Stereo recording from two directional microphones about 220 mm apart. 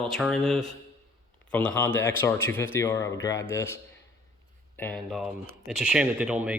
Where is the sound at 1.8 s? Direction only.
10° left (ahead or behind).